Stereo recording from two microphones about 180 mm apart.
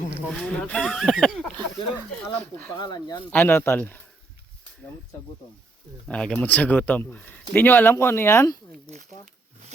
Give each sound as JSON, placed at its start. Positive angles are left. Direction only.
{"t": 0.3, "sound": "speech", "side_deg": 5}
{"t": 2.7, "sound": "speech", "side_deg": 25}
{"t": 3.2, "sound": "speech", "side_deg": 10}
{"t": 6.1, "sound": "speech", "side_deg": 5}